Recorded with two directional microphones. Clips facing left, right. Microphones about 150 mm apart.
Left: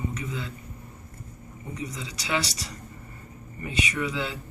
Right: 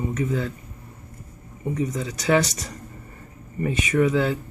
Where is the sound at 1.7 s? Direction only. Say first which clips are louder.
Right 9 dB; 50° right (ahead or behind).